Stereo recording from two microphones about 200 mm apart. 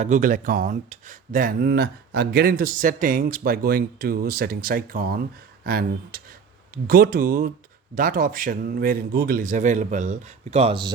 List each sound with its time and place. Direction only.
0.0 s speech: 40° right (ahead or behind); by 10.9 s 25° right (ahead or behind)